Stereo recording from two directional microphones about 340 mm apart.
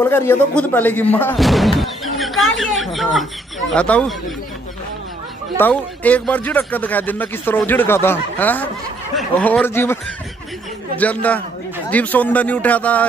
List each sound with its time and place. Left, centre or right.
0.0 s speech: centre
5.6 s speech: centre
11.0 s speech: centre